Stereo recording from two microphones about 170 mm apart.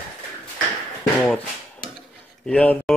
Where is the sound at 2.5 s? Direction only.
5° left (ahead or behind).